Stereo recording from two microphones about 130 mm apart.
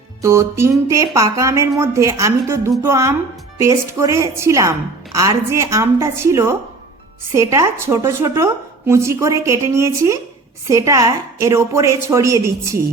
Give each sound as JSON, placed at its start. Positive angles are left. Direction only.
{"t": 0.2, "sound": "a woman's voice", "side_deg": -20}